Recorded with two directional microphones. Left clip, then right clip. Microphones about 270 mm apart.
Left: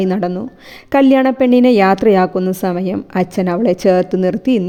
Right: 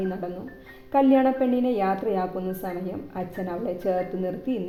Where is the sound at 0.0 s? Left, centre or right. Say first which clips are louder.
Left 13 dB; left.